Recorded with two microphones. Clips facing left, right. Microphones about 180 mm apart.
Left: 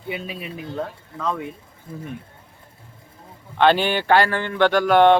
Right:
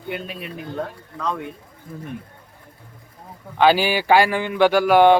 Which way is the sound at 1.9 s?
25° left (ahead or behind).